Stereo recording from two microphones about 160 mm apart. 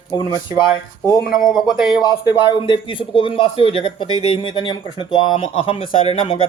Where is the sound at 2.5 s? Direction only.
30° left (ahead or behind).